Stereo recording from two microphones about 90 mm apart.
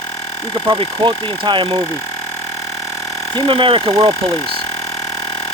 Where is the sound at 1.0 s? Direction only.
60° right (ahead or behind); by 1.8 s 75° right (ahead or behind).